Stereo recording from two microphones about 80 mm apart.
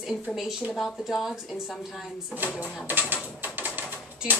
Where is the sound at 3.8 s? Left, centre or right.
Right.